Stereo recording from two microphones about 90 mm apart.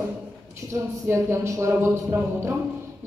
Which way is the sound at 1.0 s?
30° right (ahead or behind).